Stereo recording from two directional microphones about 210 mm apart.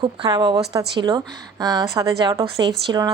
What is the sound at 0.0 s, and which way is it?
Speech, 20° right (ahead or behind).